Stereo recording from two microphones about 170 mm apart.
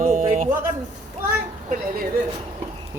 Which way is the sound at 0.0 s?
50° right (ahead or behind).